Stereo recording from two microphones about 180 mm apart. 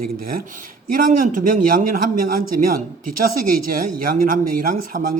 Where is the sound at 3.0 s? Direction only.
50° right (ahead or behind).